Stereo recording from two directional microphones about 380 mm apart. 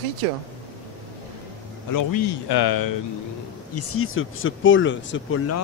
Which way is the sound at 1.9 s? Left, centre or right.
Left.